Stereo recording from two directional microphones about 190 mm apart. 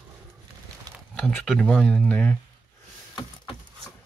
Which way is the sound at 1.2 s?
5° left (ahead or behind).